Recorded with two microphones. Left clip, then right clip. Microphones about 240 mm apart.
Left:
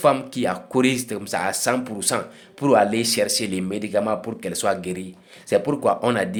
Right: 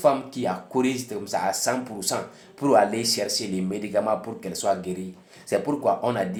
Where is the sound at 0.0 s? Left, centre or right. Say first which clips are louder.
Left 3 dB; left.